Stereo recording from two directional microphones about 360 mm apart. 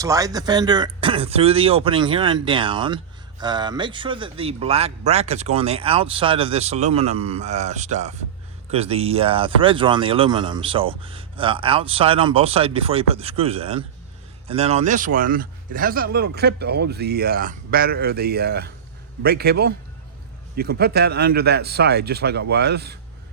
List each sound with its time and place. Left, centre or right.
0.0 s speech: centre; by 23.0 s right